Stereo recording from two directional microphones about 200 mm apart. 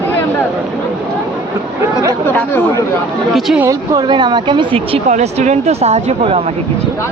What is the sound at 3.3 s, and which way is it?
Speech, centre (ahead or behind).